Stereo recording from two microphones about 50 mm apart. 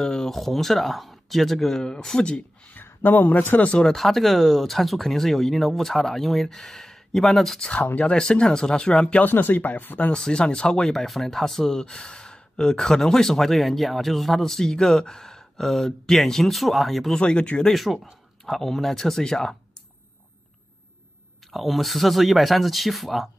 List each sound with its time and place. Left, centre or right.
0.0 s speech: centre
2.7 s speech: left
3.6 s speech: centre
3.9 s speech: centre
7.7 s speech: left
8.1 s speech: centre
9.2 s speech: left
10.1 s speech: centre
17.2 s speech: left
17.6 s speech: centre
21.5 s speech: centre